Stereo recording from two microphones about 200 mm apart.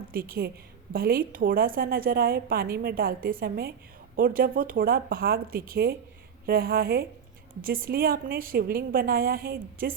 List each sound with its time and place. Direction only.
0.1 s a woman's voice: 50° right (ahead or behind)